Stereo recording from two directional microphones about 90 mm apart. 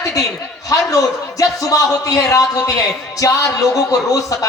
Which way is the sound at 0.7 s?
40° left (ahead or behind).